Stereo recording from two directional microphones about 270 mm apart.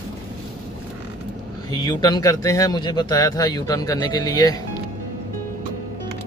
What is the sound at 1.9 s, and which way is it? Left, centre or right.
Speech, centre.